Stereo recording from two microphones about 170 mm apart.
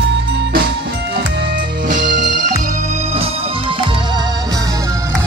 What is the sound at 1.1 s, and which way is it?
Music, 75° right (ahead or behind).